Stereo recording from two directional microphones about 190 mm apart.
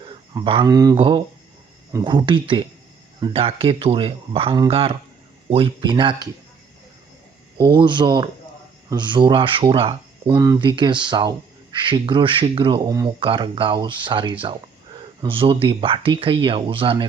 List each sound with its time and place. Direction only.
0.0 s speech: 25° right (ahead or behind)
7.6 s speech: 25° right (ahead or behind)
10.3 s speech: 20° right (ahead or behind)